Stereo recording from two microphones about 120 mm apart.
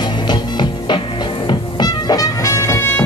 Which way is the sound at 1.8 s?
30° left (ahead or behind).